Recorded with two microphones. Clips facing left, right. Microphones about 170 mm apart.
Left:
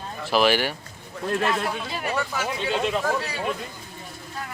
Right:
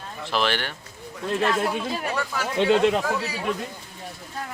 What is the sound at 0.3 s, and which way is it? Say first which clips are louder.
Speech: left 5 dB; 10° left (ahead or behind).